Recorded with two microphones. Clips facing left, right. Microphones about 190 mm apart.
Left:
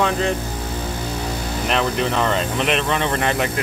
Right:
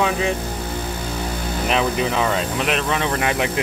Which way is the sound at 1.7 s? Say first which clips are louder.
Even; 5° right (ahead or behind).